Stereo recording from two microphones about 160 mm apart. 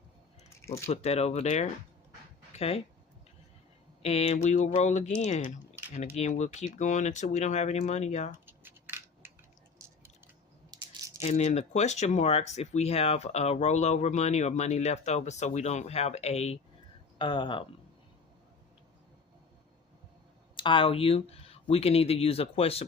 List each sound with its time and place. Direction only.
0.9 s speech: 40° left (ahead or behind)
4.0 s speech: 40° left (ahead or behind)
8.4 s crushing: 15° right (ahead or behind)
10.7 s a sound: 20° right (ahead or behind)
11.2 s speech: 45° left (ahead or behind)
17.2 s speech: 30° left (ahead or behind)
20.6 s speech: 30° left (ahead or behind)